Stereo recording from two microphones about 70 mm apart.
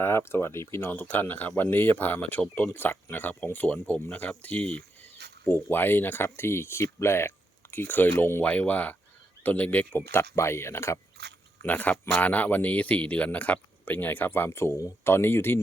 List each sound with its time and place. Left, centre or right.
0.0 s speech: left
0.9 s speech: left
5.5 s speech: left
11.6 s speech: left